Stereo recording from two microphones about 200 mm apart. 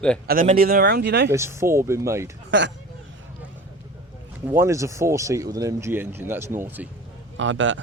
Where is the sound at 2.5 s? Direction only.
65° right (ahead or behind).